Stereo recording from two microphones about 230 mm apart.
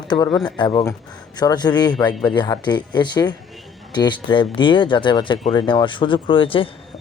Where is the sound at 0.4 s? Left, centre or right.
Centre.